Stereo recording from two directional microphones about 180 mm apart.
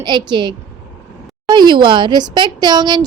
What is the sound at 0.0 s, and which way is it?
A woman's voice, 25° right (ahead or behind).